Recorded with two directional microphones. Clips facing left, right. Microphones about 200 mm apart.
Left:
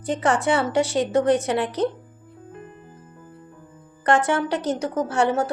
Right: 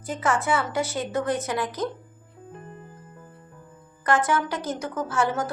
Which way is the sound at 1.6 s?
70° left (ahead or behind).